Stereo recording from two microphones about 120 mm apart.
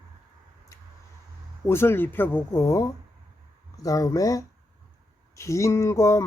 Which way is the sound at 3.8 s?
30° left (ahead or behind).